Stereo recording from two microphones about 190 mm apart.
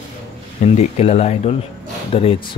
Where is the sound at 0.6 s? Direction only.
35° left (ahead or behind).